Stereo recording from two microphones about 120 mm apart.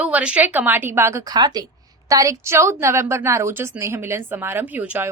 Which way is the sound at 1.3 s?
35° right (ahead or behind).